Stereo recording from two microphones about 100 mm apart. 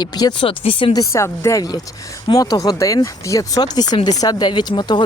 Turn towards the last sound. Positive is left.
turn(degrees=45)  # may be behind; listen again after turning